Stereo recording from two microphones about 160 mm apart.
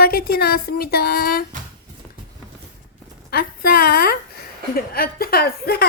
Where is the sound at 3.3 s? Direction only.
70° left (ahead or behind).